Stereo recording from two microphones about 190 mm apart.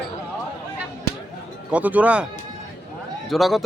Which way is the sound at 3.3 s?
Centre (ahead or behind).